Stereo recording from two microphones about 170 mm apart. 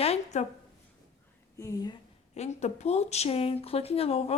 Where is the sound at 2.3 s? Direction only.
40° left (ahead or behind).